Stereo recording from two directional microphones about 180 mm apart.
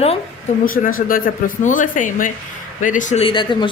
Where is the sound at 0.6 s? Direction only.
50° left (ahead or behind).